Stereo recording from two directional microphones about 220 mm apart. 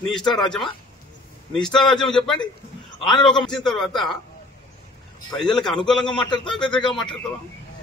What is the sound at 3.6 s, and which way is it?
Speech, centre (ahead or behind).